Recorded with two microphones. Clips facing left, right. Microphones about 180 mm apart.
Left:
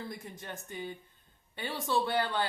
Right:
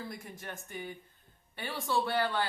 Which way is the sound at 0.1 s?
20° left (ahead or behind).